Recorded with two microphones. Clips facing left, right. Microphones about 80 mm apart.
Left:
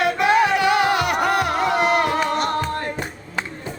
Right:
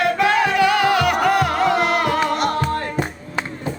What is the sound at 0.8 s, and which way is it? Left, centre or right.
Music, centre.